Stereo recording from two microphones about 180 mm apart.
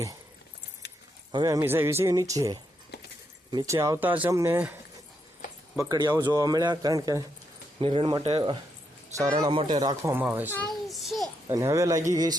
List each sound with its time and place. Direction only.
1.3 s speech: 20° right (ahead or behind)
5.9 s a man's voice: 20° right (ahead or behind)
7.8 s a man's voice: 30° right (ahead or behind)
9.1 s a man's voice: 20° right (ahead or behind)
10.5 s a sound: 5° left (ahead or behind)
11.4 s a man's voice: 15° right (ahead or behind)